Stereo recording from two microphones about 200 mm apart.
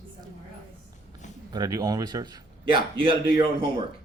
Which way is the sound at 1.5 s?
20° right (ahead or behind).